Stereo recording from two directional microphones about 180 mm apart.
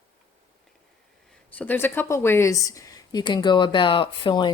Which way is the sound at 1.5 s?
10° left (ahead or behind).